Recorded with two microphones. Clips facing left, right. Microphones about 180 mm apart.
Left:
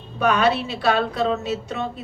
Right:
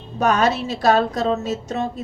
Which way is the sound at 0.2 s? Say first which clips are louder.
Right 1 dB; 40° right (ahead or behind).